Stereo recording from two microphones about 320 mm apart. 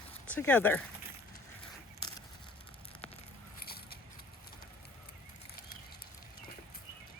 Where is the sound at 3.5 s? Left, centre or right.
Left.